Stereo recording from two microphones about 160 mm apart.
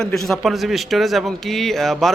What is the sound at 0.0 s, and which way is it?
A man's voice, 5° left (ahead or behind).